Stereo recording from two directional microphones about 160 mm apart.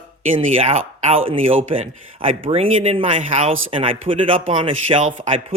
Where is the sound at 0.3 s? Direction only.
40° right (ahead or behind).